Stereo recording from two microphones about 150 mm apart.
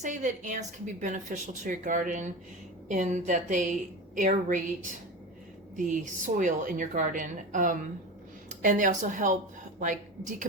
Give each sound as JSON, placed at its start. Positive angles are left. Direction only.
{"t": 0.0, "sound": "a woman's voice", "side_deg": -55}